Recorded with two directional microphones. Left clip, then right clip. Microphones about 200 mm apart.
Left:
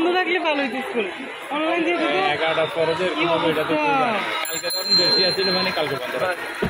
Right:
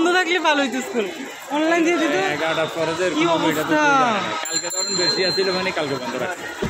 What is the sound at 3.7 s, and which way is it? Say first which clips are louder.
Speech: right 6 dB; 25° right (ahead or behind).